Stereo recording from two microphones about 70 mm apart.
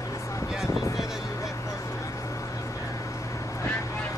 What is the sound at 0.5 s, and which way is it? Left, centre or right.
Vehicle, centre.